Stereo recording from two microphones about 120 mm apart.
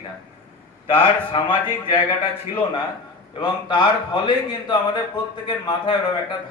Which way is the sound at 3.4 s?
40° left (ahead or behind).